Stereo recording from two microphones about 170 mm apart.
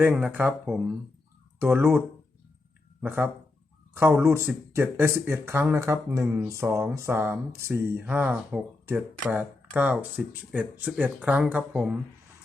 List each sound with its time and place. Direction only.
0.0 s speech: 10° right (ahead or behind)